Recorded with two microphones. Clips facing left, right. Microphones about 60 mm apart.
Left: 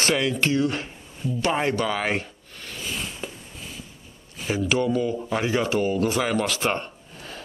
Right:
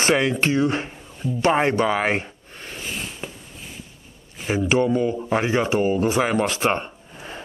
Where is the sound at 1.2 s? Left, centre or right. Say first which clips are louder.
Right 4 dB; right.